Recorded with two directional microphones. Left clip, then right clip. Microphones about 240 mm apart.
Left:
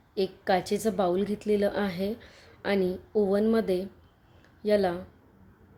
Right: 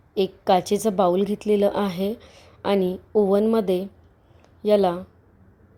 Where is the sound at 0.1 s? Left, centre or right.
Right.